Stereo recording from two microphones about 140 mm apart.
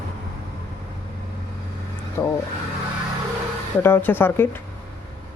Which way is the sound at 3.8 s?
15° left (ahead or behind).